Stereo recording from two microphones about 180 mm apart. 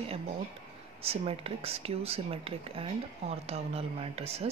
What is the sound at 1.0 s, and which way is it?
Speech, 35° right (ahead or behind).